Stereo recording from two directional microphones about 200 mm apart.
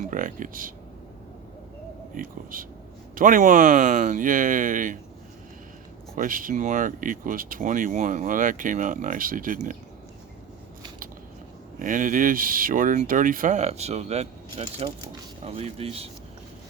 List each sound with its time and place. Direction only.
0.0 s speech: 40° right (ahead or behind)
2.1 s speech: 45° right (ahead or behind)
6.1 s speech: 45° right (ahead or behind)
11.8 s speech: 40° right (ahead or behind)